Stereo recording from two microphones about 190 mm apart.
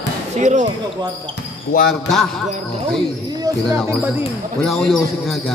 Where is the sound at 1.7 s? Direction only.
45° left (ahead or behind).